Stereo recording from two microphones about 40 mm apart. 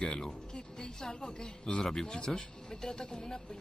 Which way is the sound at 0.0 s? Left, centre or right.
Centre.